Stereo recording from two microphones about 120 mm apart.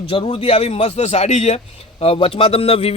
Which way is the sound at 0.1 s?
50° left (ahead or behind).